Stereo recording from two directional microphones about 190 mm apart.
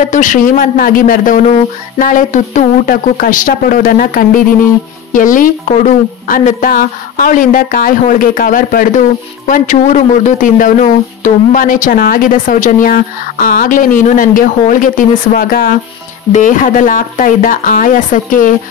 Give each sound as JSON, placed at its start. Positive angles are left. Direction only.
{"t": 0.0, "sound": "speech", "side_deg": 40}